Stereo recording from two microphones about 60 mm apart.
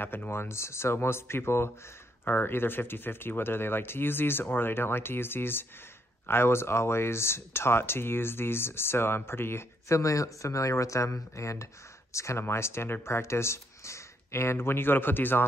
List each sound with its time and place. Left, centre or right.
0.0 s speech: left
9.9 s speech: left